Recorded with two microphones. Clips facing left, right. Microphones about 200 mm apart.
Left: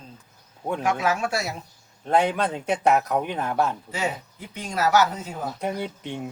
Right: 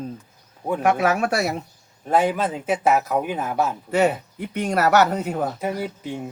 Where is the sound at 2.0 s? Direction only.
5° right (ahead or behind).